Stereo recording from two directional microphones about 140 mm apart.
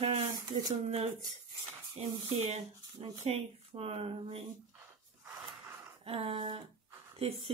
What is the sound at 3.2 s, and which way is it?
Speech, 45° right (ahead or behind).